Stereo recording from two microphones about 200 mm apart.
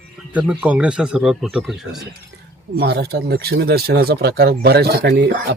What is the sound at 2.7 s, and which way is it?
Speech, 55° right (ahead or behind).